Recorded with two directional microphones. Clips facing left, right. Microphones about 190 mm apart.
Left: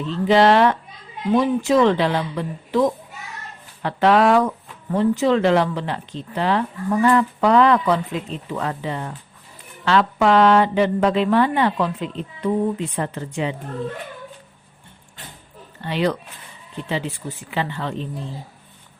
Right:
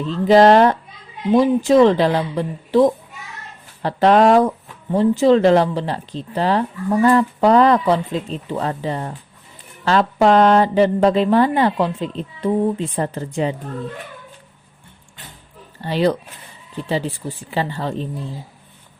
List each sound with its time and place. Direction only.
0.0 s speech: 40° right (ahead or behind)
15.8 s speech: 35° right (ahead or behind)